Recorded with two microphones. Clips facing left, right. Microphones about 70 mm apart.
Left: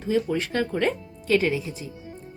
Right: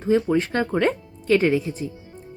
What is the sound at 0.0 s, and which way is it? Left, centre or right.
A woman's voice, right.